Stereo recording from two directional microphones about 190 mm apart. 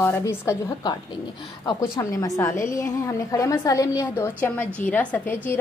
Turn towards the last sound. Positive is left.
turn(degrees=10)  # may be behind; listen again after turning